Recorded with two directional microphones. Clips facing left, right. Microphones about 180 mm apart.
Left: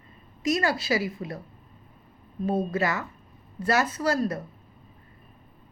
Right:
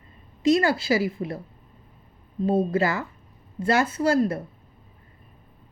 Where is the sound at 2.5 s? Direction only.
30° right (ahead or behind).